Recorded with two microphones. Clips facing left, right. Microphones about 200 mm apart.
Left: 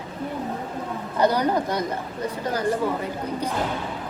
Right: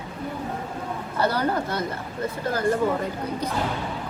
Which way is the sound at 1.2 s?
15° left (ahead or behind).